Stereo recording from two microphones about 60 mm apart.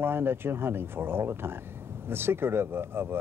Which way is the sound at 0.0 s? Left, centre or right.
Right.